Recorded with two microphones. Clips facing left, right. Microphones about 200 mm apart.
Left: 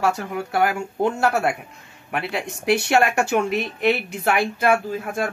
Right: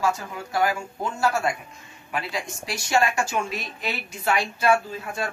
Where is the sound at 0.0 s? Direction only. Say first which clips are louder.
Left 3 dB; 65° left (ahead or behind).